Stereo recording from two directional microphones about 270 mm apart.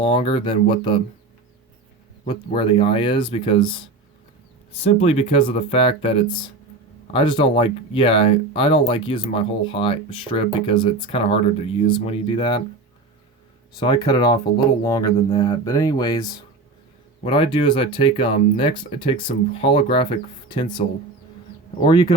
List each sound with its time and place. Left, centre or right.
0.0 s speech: centre
2.2 s speech: centre
4.8 s speech: left
13.7 s speech: centre